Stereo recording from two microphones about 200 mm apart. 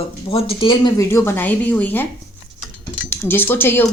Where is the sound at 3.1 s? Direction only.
10° left (ahead or behind).